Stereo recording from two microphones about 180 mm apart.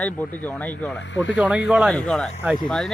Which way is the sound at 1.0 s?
90° left.